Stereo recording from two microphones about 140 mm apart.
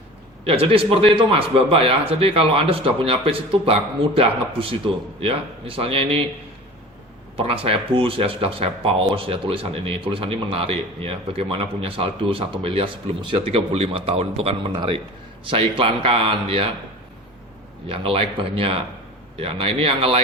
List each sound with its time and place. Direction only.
0.4 s speech: 45° right (ahead or behind)
7.3 s speech: 40° right (ahead or behind)
17.8 s speech: 40° right (ahead or behind)